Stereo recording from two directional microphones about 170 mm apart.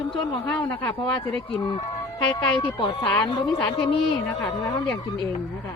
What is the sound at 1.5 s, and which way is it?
Speech, 25° left (ahead or behind).